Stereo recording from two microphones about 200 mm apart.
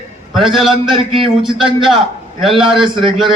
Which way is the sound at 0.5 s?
Centre (ahead or behind).